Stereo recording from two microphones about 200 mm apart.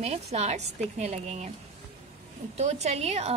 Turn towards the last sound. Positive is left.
turn(degrees=-30)  # may be behind; listen again after turning